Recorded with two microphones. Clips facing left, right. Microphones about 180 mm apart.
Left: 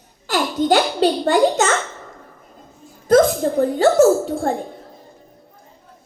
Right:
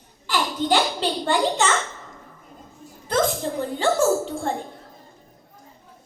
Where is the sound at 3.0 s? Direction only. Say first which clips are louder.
Left 9 dB; 45° left (ahead or behind).